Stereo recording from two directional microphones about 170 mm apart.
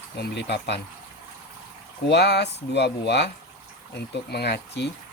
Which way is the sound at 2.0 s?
80° left.